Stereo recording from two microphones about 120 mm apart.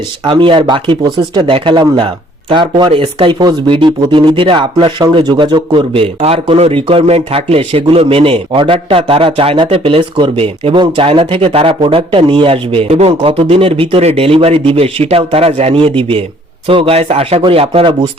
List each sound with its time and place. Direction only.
0.3 s a man's voice: 45° right (ahead or behind)